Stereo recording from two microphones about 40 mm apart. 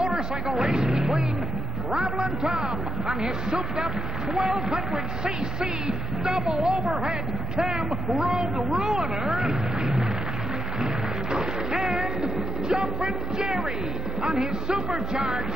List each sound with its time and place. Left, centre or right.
0.0 s vehicle: centre
0.9 s speech: centre
11.3 s music: centre
12.8 s speech: centre